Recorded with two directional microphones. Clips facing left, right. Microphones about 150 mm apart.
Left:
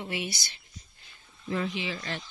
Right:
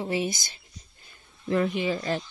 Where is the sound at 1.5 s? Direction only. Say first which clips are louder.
Right 7 dB; 60° right (ahead or behind); by 2.2 s 45° right (ahead or behind).